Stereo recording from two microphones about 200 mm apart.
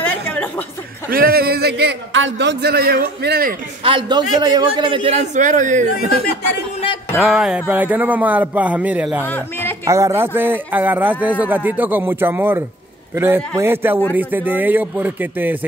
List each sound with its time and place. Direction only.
0.0 s a sound: 10° left (ahead or behind)
1.1 s a man's voice: 50° right (ahead or behind)
3.8 s a man's voice: 25° right (ahead or behind); by 5.9 s 40° right (ahead or behind)
7.2 s a man's voice: centre (ahead or behind)
9.2 s speech: 10° left (ahead or behind)
9.8 s a man's voice: 15° right (ahead or behind)